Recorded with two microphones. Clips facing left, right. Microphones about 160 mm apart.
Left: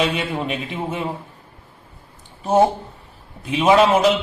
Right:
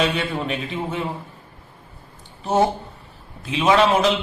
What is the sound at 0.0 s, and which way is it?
A man's voice, 10° left (ahead or behind).